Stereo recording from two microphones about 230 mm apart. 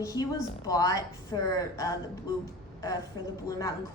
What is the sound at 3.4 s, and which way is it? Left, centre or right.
Speech, centre.